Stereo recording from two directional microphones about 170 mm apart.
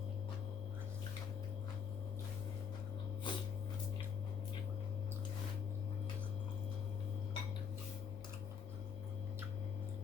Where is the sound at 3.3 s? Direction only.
30° left (ahead or behind).